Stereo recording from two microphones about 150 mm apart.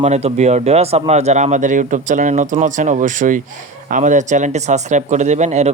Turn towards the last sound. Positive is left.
turn(degrees=-50)  # may be behind; listen again after turning